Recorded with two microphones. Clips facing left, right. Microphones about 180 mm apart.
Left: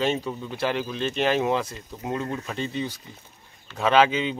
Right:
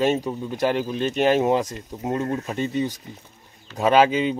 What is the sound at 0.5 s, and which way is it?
Speech, 45° right (ahead or behind).